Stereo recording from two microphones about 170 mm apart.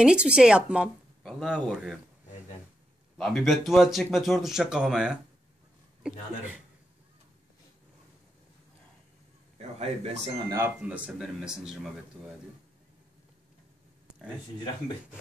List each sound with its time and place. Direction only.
0.0 s speech: 5° right (ahead or behind)
3.2 s speech: 5° left (ahead or behind)
9.6 s a man's voice: 40° right (ahead or behind)
10.5 s speech: 10° right (ahead or behind)